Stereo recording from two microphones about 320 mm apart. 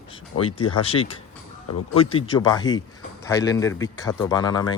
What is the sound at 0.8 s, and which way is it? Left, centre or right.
Speech, centre.